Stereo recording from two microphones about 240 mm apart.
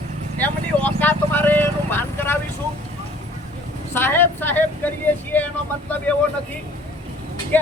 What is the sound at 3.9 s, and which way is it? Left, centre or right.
Speech, centre.